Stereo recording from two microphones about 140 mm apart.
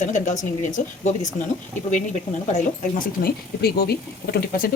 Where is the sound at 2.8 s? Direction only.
80° left.